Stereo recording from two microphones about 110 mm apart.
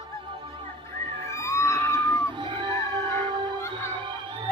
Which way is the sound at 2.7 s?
25° left (ahead or behind).